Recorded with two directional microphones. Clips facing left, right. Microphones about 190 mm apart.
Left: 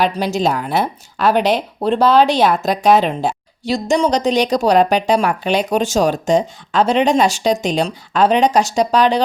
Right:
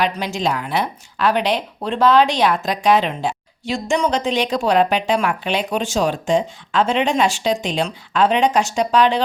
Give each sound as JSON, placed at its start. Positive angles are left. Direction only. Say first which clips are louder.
{"t": 0.0, "sound": "speech", "louder": "left 4 dB", "side_deg": 40}